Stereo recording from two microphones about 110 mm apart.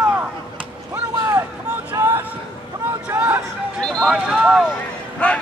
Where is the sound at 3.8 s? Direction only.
5° left (ahead or behind).